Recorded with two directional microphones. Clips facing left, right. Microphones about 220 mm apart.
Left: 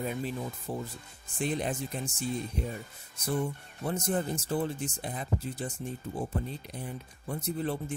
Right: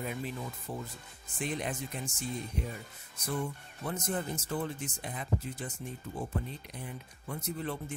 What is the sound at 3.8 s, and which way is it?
Speech, 30° left (ahead or behind).